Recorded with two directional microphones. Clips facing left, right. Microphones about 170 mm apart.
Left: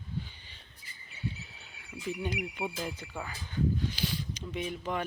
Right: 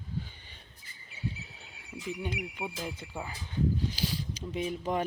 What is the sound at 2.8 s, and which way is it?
Speech, 25° right (ahead or behind).